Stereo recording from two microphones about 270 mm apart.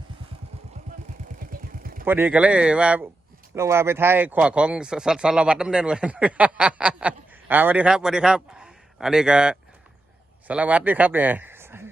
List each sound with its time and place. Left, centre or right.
1.5 s vehicle: right
2.0 s a man's voice: centre